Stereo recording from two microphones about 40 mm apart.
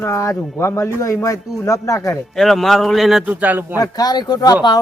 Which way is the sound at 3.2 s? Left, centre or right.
Right.